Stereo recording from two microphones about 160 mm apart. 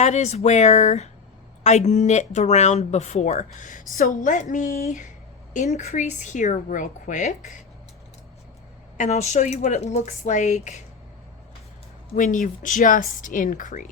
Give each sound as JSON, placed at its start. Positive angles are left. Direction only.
{"t": 0.0, "sound": "speech", "side_deg": 45}
{"t": 9.0, "sound": "speech", "side_deg": 45}
{"t": 12.1, "sound": "speech", "side_deg": 50}